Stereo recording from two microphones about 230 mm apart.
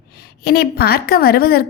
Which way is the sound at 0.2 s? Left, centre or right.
Left.